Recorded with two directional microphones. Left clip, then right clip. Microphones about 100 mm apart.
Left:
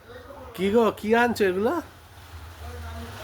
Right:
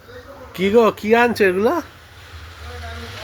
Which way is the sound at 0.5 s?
25° right (ahead or behind).